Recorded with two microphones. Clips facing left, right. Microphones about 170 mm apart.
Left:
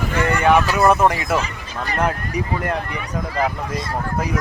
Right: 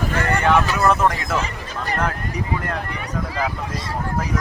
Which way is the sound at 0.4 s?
15° left (ahead or behind).